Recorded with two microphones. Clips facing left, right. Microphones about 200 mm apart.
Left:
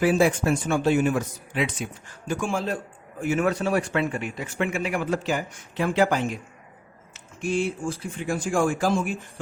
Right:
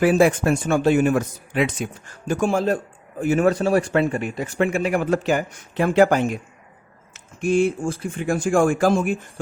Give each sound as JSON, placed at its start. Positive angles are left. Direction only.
{"t": 0.0, "sound": "speech", "side_deg": -60}